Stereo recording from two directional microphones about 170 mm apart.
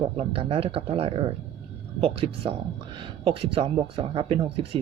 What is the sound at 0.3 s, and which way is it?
Speech, 35° right (ahead or behind).